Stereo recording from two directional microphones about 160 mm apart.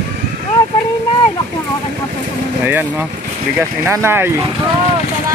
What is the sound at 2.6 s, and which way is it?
Speech, 10° right (ahead or behind).